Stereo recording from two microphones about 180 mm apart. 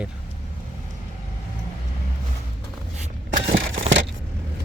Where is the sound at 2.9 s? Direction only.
45° right (ahead or behind).